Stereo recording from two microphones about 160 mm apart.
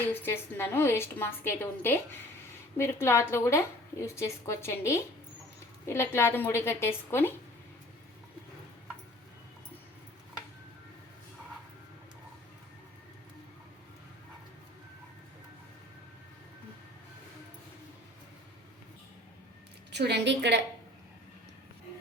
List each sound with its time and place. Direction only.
0.0 s a woman's voice: 15° left (ahead or behind)
19.9 s a woman's voice: 90° right